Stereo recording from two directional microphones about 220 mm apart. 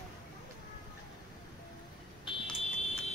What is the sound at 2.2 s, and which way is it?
Smoke detector, 20° left (ahead or behind).